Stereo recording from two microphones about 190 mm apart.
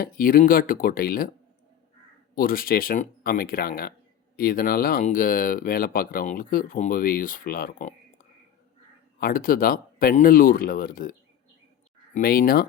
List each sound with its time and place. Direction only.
0.0 s speech: 50° left (ahead or behind)
2.3 s speech: 50° left (ahead or behind)
9.1 s speech: 50° left (ahead or behind)
12.1 s speech: 50° left (ahead or behind)